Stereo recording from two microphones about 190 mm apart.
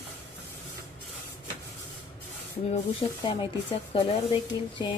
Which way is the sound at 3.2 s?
25° left (ahead or behind).